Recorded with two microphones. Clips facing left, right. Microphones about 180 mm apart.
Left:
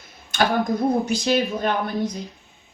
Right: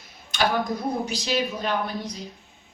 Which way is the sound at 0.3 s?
50° left (ahead or behind).